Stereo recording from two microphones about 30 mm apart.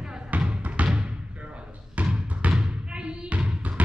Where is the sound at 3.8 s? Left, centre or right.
Right.